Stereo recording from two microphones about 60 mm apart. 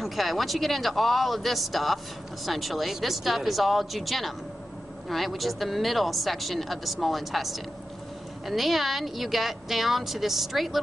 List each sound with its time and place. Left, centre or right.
0.0 s speech: centre